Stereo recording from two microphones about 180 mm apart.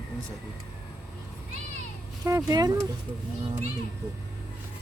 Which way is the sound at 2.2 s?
15° right (ahead or behind).